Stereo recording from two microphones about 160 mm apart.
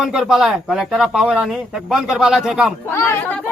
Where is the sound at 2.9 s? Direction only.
15° left (ahead or behind).